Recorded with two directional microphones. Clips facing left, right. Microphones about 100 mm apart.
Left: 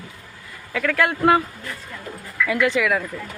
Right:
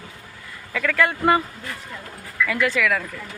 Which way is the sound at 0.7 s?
5° left (ahead or behind).